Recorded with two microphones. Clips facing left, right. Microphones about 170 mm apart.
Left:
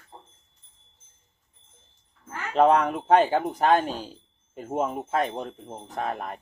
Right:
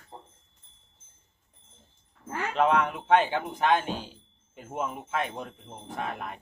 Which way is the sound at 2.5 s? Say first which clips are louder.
Left 5 dB; 40° left (ahead or behind).